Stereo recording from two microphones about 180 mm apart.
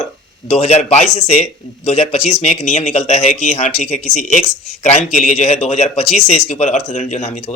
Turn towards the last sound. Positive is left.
turn(degrees=40)  # may be behind; listen again after turning